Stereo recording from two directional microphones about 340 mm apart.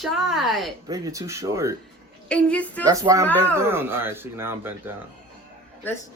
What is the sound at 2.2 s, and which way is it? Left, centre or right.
Speech, centre.